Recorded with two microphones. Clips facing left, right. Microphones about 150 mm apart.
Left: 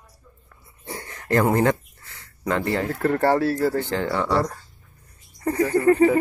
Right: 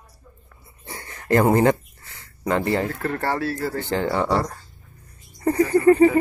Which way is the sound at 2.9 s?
5° left (ahead or behind).